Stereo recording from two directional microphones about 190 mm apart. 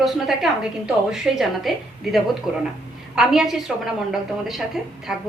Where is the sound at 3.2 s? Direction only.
Centre (ahead or behind).